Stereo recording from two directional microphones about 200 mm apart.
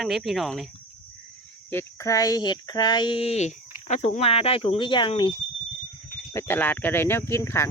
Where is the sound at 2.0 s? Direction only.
15° left (ahead or behind).